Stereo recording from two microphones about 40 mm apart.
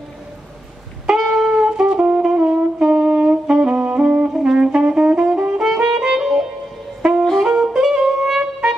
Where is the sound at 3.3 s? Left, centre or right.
Right.